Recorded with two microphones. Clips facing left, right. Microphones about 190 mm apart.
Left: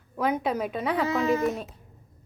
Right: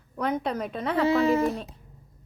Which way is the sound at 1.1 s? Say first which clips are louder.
Right 4 dB; 30° right (ahead or behind).